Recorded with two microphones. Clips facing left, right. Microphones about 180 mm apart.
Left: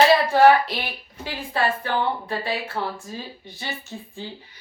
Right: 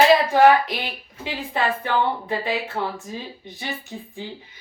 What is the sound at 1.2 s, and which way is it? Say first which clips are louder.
A woman's voice: even; 20° right (ahead or behind).